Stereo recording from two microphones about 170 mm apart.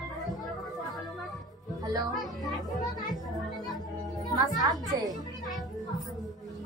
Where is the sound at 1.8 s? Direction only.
25° right (ahead or behind).